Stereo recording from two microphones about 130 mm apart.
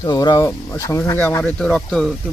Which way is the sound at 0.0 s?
30° left (ahead or behind).